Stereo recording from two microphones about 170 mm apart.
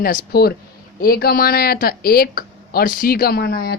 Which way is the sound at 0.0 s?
55° left (ahead or behind).